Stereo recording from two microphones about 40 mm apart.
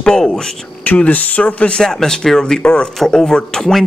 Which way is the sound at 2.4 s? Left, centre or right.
Left.